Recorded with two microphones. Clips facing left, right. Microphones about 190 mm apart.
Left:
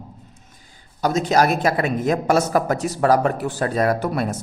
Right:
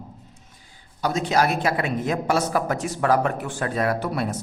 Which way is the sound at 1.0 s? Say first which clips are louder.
Left 4 dB; 45° left (ahead or behind).